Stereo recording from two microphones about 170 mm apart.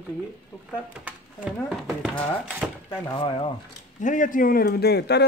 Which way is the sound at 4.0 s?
50° left (ahead or behind).